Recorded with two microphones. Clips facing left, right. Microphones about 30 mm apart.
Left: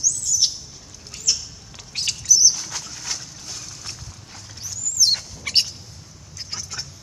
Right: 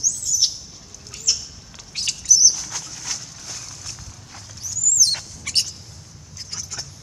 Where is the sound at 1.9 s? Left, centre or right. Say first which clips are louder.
Even; centre.